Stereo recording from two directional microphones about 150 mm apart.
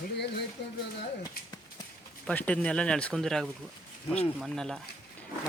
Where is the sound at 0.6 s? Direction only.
90° left.